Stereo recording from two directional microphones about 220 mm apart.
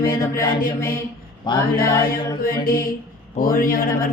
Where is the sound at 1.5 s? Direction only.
20° left (ahead or behind).